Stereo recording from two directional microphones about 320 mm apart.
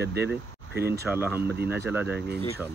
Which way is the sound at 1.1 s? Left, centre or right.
Centre.